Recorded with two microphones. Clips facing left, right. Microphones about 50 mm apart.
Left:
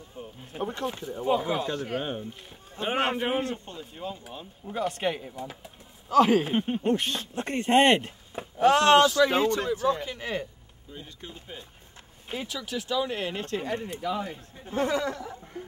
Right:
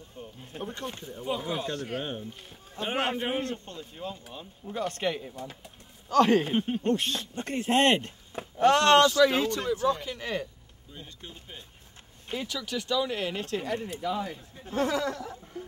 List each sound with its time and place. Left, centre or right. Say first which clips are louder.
0.2 s speech: left 5 dB; centre
1.3 s a man's voice: left 5 dB; centre
9.1 s a man's voice: left 1 dB; left
11.0 s speech: left 2 dB; centre
12.3 s a sound: even; centre
12.7 s a man's voice: even; centre
14.7 s a sound: left 1 dB; left